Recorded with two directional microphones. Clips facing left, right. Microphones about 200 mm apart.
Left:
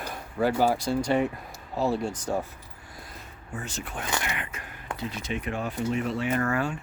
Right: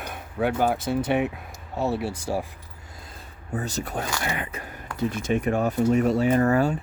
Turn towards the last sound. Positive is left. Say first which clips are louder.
# right 6 dB
turn(degrees=-40)  # may be behind; listen again after turning